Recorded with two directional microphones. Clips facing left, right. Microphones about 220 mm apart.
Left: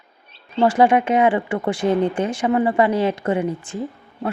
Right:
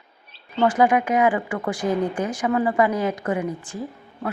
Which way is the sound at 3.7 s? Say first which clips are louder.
Left 4 dB; 25° left (ahead or behind).